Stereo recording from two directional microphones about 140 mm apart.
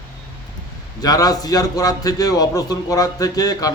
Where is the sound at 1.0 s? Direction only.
25° left (ahead or behind).